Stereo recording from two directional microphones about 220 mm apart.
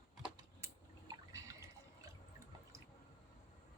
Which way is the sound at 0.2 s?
15° right (ahead or behind).